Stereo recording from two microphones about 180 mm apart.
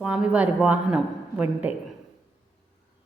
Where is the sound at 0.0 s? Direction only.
5° right (ahead or behind).